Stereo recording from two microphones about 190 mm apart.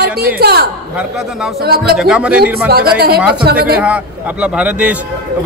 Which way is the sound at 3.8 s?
5° right (ahead or behind).